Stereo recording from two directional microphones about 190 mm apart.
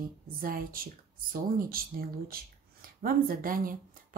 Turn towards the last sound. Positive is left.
turn(degrees=-45)  # may be behind; listen again after turning